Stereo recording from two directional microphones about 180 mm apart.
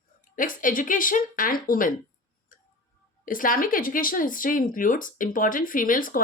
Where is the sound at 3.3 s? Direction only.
50° left (ahead or behind).